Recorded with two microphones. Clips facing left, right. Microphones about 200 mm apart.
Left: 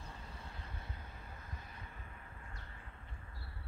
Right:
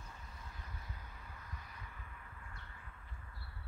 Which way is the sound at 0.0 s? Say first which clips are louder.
Left 3 dB; 30° left (ahead or behind).